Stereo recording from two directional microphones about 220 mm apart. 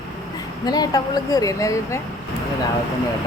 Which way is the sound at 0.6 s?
20° left (ahead or behind).